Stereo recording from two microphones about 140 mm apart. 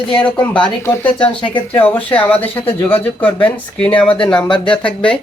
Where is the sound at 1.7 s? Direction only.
15° left (ahead or behind).